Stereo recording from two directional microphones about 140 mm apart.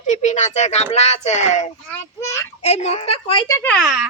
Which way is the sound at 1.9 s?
20° left (ahead or behind).